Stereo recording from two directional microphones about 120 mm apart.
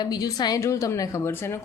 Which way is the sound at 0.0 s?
35° left (ahead or behind).